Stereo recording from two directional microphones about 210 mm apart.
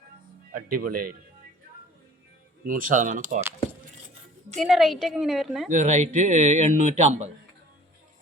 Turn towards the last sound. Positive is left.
turn(degrees=-35)  # may be behind; listen again after turning